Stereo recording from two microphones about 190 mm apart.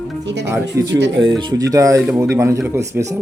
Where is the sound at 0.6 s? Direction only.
65° right (ahead or behind).